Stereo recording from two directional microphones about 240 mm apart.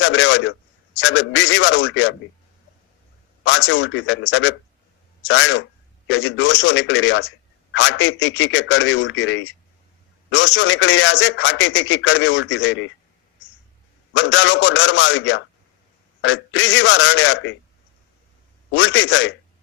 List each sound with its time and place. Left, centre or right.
0.0 s a man's voice: left
3.4 s a man's voice: left
14.1 s a man's voice: left
18.7 s a man's voice: left